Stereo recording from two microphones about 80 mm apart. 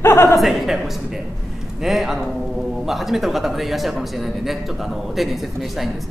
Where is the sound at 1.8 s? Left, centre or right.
Centre.